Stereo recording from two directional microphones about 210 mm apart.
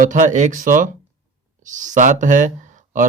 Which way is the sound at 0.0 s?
35° right (ahead or behind).